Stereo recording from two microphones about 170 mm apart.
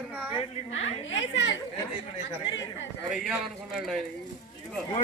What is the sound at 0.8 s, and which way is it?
Speech, 90° left.